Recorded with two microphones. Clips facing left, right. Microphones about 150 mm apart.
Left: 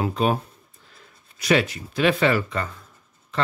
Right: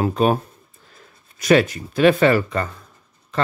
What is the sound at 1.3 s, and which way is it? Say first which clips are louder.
Speech: right 5 dB; 45° right (ahead or behind).